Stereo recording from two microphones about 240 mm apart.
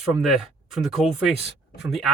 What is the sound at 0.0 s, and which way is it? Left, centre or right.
Speech, centre.